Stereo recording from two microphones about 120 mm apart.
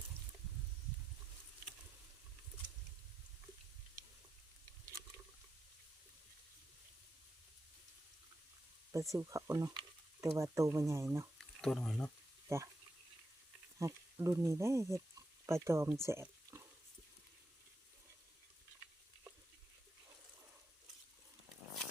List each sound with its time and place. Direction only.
8.9 s speech: 25° right (ahead or behind)
11.6 s speech: 5° left (ahead or behind)
12.5 s speech: 25° right (ahead or behind)
13.7 s speech: 25° right (ahead or behind)
15.9 s a sound: 20° right (ahead or behind)